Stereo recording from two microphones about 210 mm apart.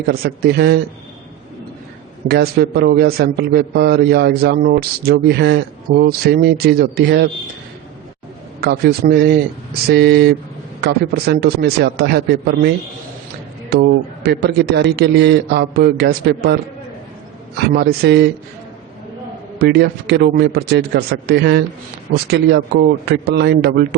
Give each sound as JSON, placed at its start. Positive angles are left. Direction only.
{"t": 0.1, "sound": "a man's voice", "side_deg": -45}
{"t": 2.2, "sound": "a man's voice", "side_deg": -50}
{"t": 8.6, "sound": "a man's voice", "side_deg": -50}
{"t": 14.3, "sound": "a man's voice", "side_deg": -50}
{"t": 17.7, "sound": "a man's voice", "side_deg": -50}
{"t": 19.5, "sound": "a man's voice", "side_deg": -50}